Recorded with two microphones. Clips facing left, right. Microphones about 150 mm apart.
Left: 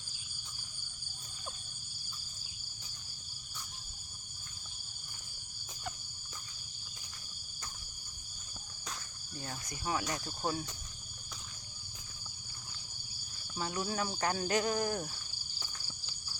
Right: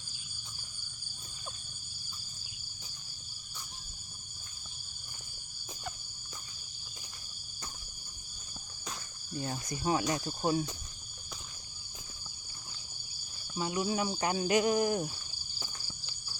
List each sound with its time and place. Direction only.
9.4 s speech: 25° right (ahead or behind)
13.5 s speech: 10° right (ahead or behind)
15.6 s cricket: 10° right (ahead or behind)